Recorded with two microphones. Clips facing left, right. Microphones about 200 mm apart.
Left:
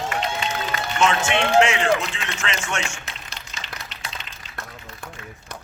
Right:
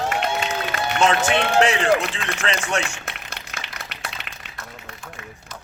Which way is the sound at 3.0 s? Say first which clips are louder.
Right 3 dB; 60° right (ahead or behind).